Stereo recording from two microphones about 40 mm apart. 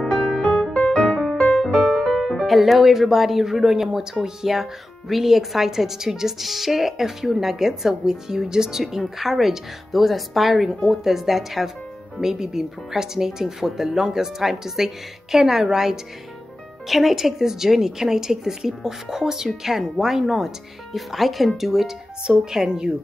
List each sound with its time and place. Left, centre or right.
0.0 s music: centre
1.8 s speech: centre
22.2 s speech: centre